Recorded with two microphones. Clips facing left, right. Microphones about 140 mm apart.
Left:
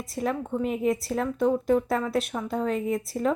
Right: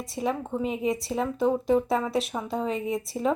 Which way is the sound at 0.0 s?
Centre (ahead or behind).